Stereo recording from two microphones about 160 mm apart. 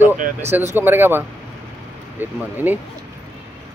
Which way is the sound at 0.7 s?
15° right (ahead or behind).